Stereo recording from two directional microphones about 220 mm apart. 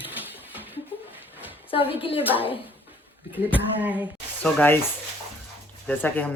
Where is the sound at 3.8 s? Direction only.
5° right (ahead or behind).